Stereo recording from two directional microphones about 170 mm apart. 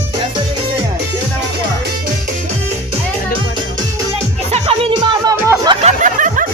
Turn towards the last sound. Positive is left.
turn(degrees=-45)  # may be behind; listen again after turning